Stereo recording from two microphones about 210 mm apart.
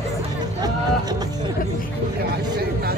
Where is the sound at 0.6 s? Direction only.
20° right (ahead or behind).